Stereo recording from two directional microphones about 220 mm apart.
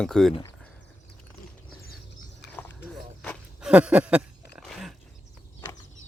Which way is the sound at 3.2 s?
5° left (ahead or behind).